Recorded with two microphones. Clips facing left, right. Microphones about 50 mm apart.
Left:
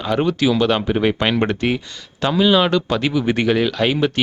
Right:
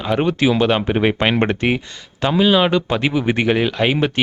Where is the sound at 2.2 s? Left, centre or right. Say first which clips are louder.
Right 1 dB; centre.